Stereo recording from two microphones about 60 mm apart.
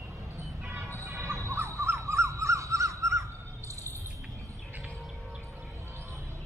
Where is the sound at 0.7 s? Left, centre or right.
Right.